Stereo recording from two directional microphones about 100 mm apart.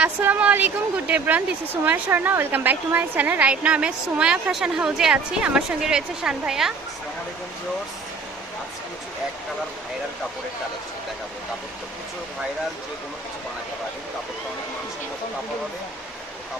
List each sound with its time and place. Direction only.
0.2 s speech: 15° right (ahead or behind)